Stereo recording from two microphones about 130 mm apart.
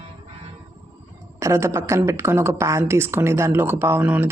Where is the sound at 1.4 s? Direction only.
20° right (ahead or behind).